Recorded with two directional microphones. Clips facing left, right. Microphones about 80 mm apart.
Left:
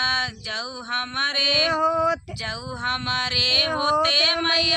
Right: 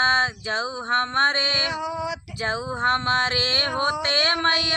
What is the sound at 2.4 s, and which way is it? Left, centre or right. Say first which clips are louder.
Mantra: right 5 dB; right.